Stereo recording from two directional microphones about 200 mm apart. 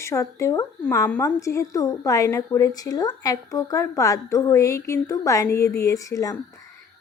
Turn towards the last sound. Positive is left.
turn(degrees=15)  # may be behind; listen again after turning